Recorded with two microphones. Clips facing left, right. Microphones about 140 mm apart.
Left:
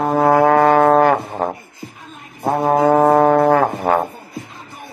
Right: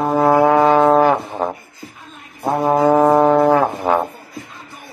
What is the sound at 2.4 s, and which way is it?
Brass instrument, 15° left (ahead or behind).